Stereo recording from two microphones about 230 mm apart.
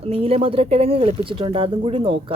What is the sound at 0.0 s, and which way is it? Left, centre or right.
Speech, right.